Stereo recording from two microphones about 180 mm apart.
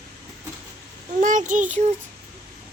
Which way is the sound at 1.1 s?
45° right (ahead or behind).